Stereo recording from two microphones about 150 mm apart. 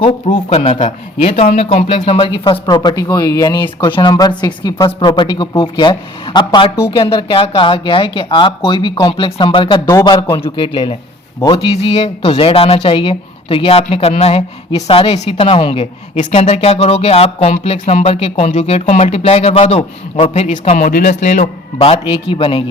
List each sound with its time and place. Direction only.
0.0 s speech: 35° left (ahead or behind)
9.8 s speech: 20° left (ahead or behind)
11.4 s speech: 40° left (ahead or behind)
20.5 s speech: 55° left (ahead or behind)
21.0 s speech: 50° left (ahead or behind)